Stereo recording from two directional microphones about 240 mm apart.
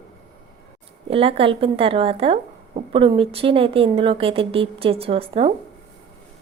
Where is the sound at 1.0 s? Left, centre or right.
Right.